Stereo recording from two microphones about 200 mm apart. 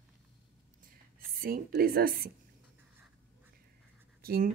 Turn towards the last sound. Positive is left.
turn(degrees=-50)  # may be behind; listen again after turning